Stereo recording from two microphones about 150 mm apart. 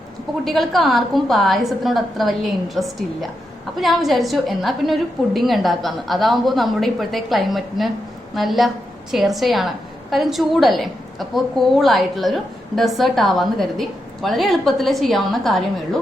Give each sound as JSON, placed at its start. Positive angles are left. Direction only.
{"t": 0.4, "sound": "a woman's voice", "side_deg": 0}